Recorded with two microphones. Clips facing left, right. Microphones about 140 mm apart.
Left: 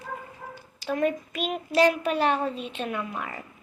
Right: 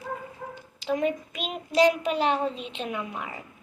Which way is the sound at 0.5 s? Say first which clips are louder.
Right 1 dB; 20° right (ahead or behind).